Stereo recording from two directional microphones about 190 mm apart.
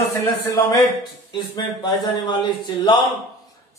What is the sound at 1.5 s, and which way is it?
A man's voice, 20° left (ahead or behind).